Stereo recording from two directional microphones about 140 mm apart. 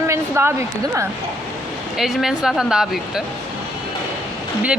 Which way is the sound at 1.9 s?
Centre (ahead or behind).